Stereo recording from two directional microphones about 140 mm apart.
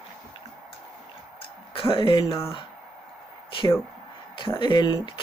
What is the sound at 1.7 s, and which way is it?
Speech, 40° left (ahead or behind).